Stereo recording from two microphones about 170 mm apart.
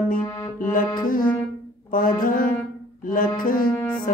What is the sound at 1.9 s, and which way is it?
Brass instrument, 55° left (ahead or behind).